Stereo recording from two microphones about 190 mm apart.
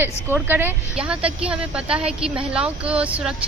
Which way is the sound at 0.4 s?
10° right (ahead or behind).